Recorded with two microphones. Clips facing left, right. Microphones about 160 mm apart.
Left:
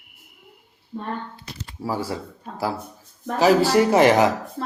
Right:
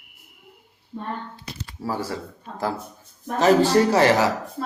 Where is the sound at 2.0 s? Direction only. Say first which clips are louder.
Left 1 dB; 10° left (ahead or behind).